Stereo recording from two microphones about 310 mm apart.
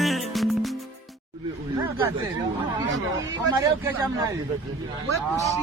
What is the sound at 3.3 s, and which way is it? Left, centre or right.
A man's voice, centre.